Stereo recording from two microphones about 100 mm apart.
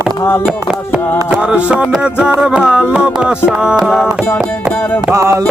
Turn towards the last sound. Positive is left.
turn(degrees=-30)  # may be behind; listen again after turning